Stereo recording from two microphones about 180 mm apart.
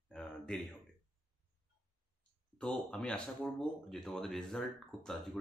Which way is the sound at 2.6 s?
5° left (ahead or behind).